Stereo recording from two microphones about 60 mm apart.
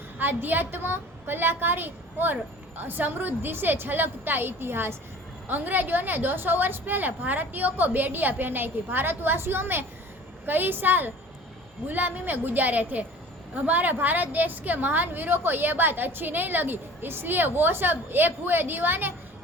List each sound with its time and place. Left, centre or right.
0.2 s a woman's voice: right